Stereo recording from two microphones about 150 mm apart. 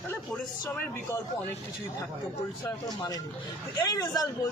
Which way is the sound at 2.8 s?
25° left (ahead or behind).